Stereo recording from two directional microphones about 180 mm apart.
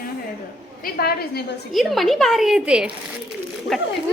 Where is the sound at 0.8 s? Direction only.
60° left (ahead or behind).